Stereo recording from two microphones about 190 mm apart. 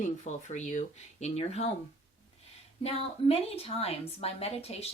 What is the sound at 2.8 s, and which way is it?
A woman's voice, 35° left (ahead or behind).